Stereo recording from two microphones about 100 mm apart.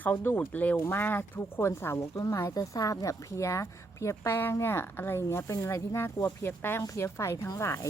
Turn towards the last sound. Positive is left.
turn(degrees=30)  # may be behind; listen again after turning